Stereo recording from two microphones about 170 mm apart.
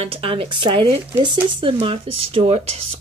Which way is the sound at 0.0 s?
35° right (ahead or behind).